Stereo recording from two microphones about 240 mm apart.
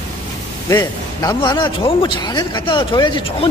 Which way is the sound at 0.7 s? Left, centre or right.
Centre.